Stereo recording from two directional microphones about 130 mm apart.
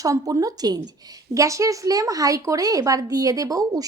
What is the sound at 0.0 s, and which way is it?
Speech, 25° right (ahead or behind).